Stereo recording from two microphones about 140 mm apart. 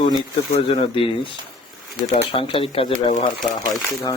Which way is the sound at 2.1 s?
45° left (ahead or behind).